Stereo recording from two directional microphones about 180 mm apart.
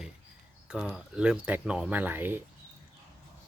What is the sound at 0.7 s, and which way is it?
Speech, 5° right (ahead or behind).